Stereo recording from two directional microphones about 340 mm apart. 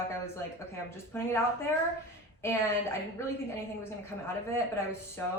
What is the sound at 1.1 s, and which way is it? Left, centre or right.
Speech, centre.